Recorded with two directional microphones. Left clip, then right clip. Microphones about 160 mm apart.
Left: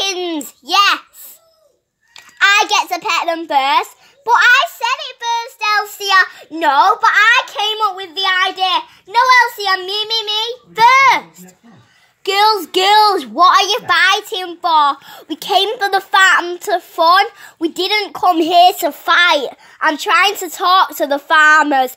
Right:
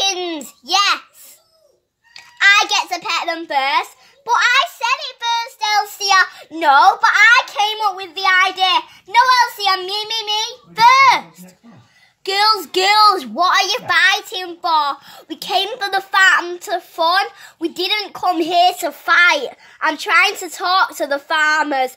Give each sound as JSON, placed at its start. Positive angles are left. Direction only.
{"t": 0.0, "sound": "child singing", "side_deg": 35}
{"t": 2.1, "sound": "a child's voice", "side_deg": 30}